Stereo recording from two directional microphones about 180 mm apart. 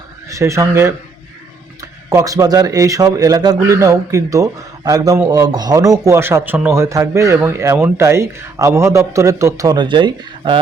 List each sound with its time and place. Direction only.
0.3 s a man's voice: 15° right (ahead or behind)
2.0 s a man's voice: 20° right (ahead or behind)